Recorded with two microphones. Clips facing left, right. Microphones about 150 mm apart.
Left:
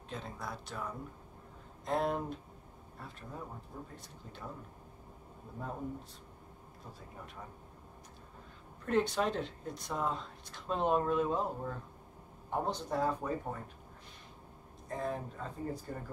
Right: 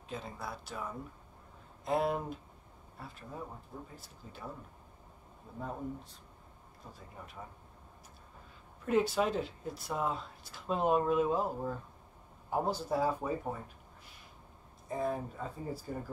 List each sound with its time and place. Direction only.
0.1 s speech: 5° right (ahead or behind)
8.8 s speech: 5° right (ahead or behind)
14.9 s speech: 10° right (ahead or behind)